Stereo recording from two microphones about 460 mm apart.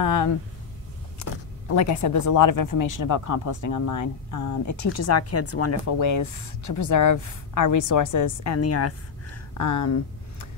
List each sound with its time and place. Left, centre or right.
0.0 s speech: left